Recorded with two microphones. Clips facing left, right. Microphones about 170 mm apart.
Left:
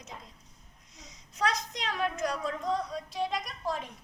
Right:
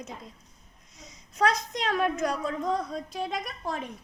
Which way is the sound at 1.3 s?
55° right (ahead or behind).